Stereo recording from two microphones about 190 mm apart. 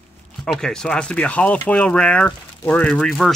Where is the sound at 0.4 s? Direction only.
Centre (ahead or behind).